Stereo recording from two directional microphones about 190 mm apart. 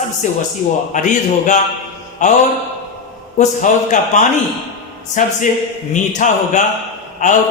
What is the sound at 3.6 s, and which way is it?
Speech, 40° left (ahead or behind).